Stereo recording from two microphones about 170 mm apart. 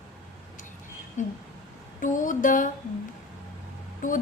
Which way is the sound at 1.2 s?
45° left (ahead or behind).